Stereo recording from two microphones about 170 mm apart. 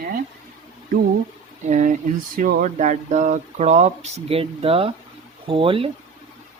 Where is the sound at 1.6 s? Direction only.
45° right (ahead or behind).